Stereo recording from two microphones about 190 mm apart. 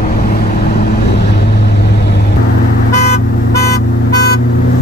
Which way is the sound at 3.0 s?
55° left (ahead or behind).